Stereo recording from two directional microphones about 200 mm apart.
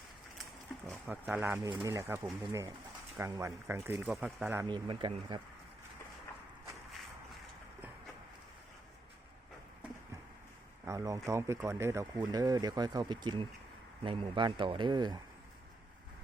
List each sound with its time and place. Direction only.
0.9 s speech: centre (ahead or behind)
4.7 s speech: 25° right (ahead or behind)
10.8 s speech: 15° right (ahead or behind)